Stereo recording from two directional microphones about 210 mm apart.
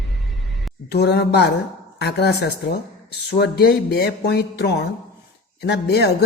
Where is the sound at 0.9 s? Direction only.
50° left (ahead or behind).